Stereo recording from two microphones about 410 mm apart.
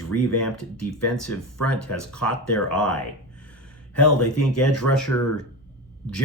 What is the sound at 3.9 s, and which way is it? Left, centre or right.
Speech, left.